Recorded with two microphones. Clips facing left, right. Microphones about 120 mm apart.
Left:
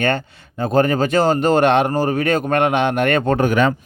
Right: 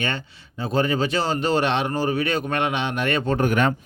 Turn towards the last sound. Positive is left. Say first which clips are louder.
# left 6 dB
turn(degrees=55)  # may be behind; listen again after turning